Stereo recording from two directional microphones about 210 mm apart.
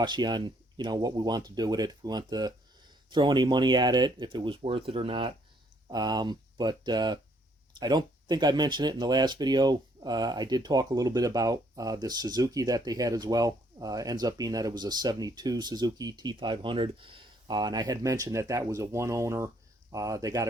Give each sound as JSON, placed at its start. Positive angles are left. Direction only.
{"t": 0.0, "sound": "speech", "side_deg": -20}